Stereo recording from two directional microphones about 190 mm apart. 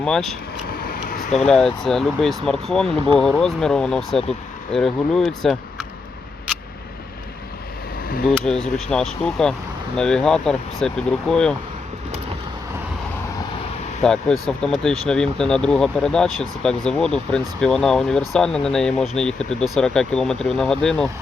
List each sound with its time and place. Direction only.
0.0 s speech: centre (ahead or behind)
0.7 s vehicle: 50° left (ahead or behind)
1.5 s speech: 5° left (ahead or behind)
8.3 s speech: 5° left (ahead or behind)
14.0 s speech: 5° left (ahead or behind)